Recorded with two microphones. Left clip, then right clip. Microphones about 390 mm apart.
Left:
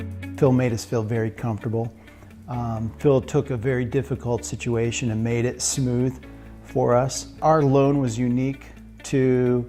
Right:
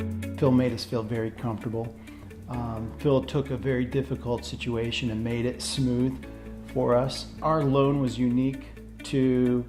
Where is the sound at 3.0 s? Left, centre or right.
Left.